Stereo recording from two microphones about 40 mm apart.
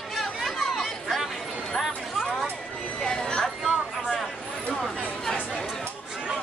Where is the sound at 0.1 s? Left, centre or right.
Centre.